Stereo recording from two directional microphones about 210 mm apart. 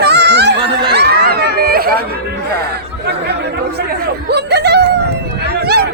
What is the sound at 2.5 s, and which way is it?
Chatter, 50° right (ahead or behind).